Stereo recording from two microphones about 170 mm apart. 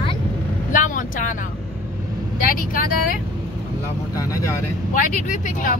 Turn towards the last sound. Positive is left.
turn(degrees=50)  # may be behind; listen again after turning